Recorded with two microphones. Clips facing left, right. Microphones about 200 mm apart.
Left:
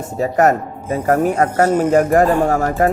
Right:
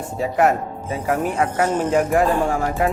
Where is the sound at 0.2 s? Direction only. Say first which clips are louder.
Left 4 dB; 45° left (ahead or behind).